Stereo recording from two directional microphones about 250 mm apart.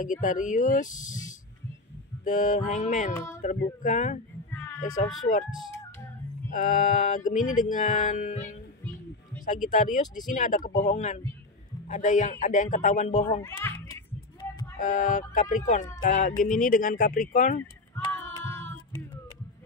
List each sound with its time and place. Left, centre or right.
0.0 s music: left
2.2 s a man's voice: left
4.5 s a sound: centre
6.5 s music: left
9.7 s music: left
10.8 s a man's voice: left
13.4 s a child's voice: centre
14.8 s music: left
17.9 s child singing: centre